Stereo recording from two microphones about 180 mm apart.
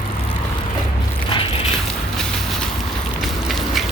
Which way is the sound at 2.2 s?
5° left (ahead or behind).